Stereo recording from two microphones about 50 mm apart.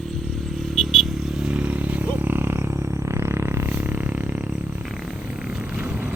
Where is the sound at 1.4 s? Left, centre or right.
Right.